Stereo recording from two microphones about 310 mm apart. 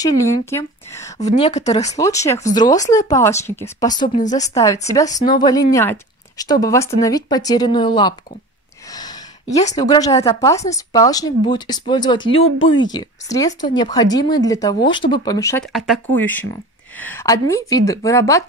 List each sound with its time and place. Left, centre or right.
0.0 s speech: centre
1.2 s a woman's voice: left
2.0 s speech: centre
4.0 s speech: centre
8.9 s a sound: centre
9.7 s speech: centre
12.4 s speech: left
12.9 s speech: centre
13.5 s a woman's voice: left
13.8 s speech: centre